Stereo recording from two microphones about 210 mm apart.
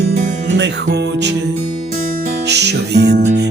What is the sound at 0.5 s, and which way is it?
Music, 55° right (ahead or behind).